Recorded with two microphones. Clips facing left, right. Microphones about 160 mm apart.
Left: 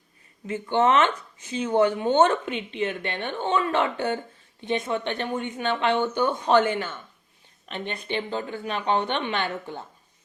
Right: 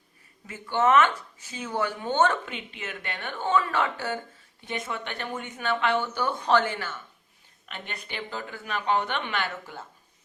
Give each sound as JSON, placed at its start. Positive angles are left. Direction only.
{"t": 0.4, "sound": "speech", "side_deg": 25}